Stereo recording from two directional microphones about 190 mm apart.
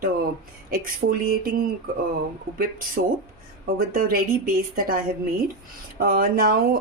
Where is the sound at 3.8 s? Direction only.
50° right (ahead or behind).